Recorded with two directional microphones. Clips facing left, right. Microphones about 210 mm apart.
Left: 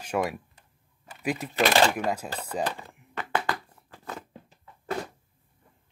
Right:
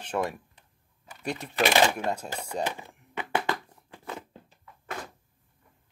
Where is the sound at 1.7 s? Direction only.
10° right (ahead or behind).